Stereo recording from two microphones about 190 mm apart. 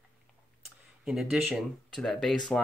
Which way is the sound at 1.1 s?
Centre (ahead or behind).